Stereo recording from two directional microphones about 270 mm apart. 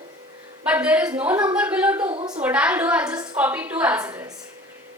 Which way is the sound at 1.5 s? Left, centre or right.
Centre.